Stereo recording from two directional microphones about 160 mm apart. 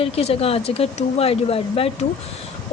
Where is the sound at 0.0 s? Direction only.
40° left (ahead or behind).